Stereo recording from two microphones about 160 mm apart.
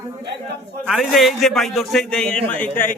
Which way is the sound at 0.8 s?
Centre (ahead or behind).